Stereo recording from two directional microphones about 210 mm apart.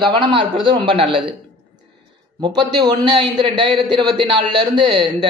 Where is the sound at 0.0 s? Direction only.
25° right (ahead or behind).